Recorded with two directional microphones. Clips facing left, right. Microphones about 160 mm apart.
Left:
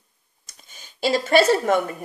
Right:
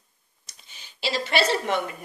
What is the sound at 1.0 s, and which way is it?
Speech, 45° left (ahead or behind).